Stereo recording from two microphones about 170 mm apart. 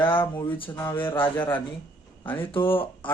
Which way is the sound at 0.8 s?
15° left (ahead or behind).